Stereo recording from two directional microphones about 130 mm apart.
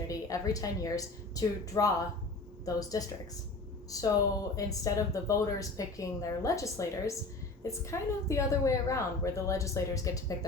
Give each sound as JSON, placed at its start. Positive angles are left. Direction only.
{"t": 0.1, "sound": "a woman's voice", "side_deg": 25}